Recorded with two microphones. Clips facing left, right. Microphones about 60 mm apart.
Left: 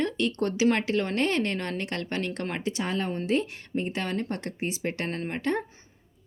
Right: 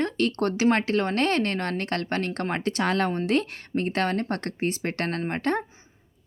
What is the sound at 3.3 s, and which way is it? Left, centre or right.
Speech, right.